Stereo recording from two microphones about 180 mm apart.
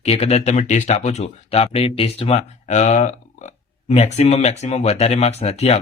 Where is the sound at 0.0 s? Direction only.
35° left (ahead or behind).